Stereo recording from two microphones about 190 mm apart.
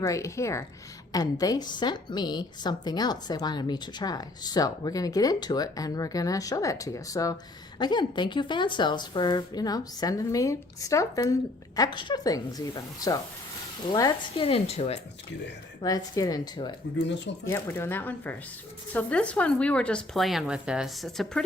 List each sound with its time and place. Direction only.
0.0 s a woman's voice: 15° left (ahead or behind); by 15.0 s 35° left (ahead or behind)
15.8 s a woman's voice: 20° left (ahead or behind); by 21.4 s centre (ahead or behind)